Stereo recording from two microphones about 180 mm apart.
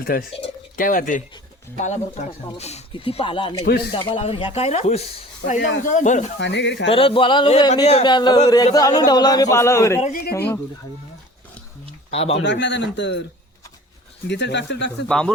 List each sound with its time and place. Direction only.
0.0 s speech: 55° left (ahead or behind)
0.8 s speech: 50° left (ahead or behind)
6.4 s speech: 80° left
6.9 s speech: 30° left (ahead or behind)
10.0 s speech: 50° left (ahead or behind)
10.3 s speech: 10° left (ahead or behind)
12.1 s speech: 35° left (ahead or behind)
12.4 s speech: 75° left (ahead or behind)
14.3 s speech: 75° left (ahead or behind)
15.0 s speech: 5° left (ahead or behind)